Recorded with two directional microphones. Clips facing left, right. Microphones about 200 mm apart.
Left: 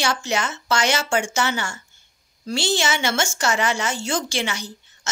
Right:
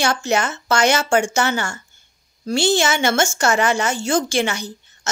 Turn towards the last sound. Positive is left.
turn(degrees=-50)  # may be behind; listen again after turning